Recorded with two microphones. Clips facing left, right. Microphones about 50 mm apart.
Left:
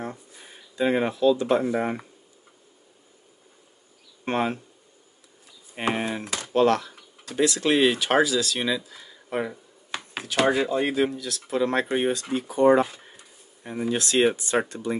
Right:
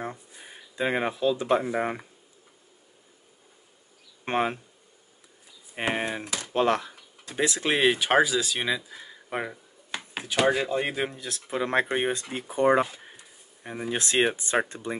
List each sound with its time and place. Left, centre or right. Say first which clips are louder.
0.0 s speech: left 1 dB; centre
4.2 s speech: left 1 dB; centre
5.8 s speech: left 2 dB; centre
6.5 s speech: left 4 dB; centre
11.1 s speech: left 4 dB; right